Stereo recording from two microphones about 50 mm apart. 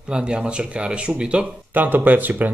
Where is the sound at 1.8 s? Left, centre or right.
Right.